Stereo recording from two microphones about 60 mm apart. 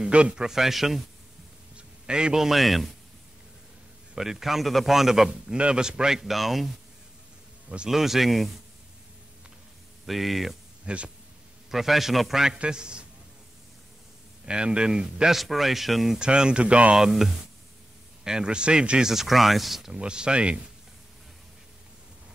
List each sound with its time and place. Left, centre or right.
0.0 s a man's voice: centre
0.5 s a man's voice: centre
1.8 s a man's voice: centre
4.1 s a man's voice: centre
7.9 s a man's voice: centre
10.0 s a man's voice: centre
10.9 s speech: centre
11.7 s a man's voice: centre
14.4 s speech: centre
15.3 s a man's voice: centre
16.2 s speech: centre
17.0 s speech: centre